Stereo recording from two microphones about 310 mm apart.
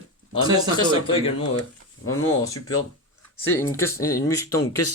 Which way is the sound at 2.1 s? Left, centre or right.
Left.